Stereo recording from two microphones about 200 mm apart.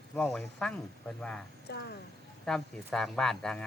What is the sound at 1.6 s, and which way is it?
Speech, 55° left (ahead or behind).